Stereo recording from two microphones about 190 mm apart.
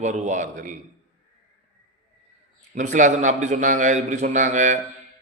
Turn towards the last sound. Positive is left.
turn(degrees=-40)  # may be behind; listen again after turning